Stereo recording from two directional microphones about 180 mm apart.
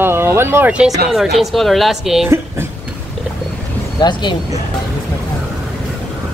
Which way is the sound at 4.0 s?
25° left (ahead or behind).